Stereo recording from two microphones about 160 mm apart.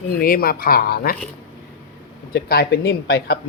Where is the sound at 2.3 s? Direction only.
75° left (ahead or behind).